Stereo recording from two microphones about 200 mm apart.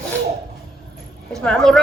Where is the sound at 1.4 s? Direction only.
Centre (ahead or behind).